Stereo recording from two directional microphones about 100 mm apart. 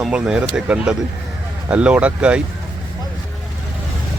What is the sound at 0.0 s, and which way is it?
Speech, 10° right (ahead or behind).